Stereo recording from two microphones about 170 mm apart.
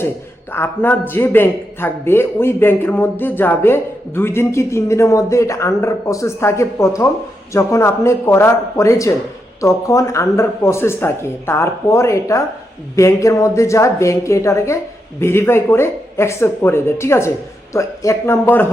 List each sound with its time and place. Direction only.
0.5 s a man's voice: 15° left (ahead or behind)